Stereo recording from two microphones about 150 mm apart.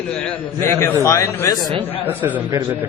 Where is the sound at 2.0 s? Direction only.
10° right (ahead or behind).